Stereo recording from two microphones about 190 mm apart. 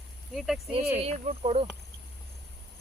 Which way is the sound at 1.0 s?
35° right (ahead or behind).